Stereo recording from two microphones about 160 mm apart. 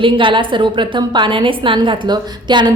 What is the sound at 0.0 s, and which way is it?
A woman's voice, 30° right (ahead or behind).